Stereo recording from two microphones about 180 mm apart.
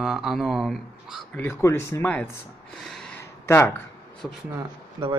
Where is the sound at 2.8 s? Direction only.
Centre (ahead or behind).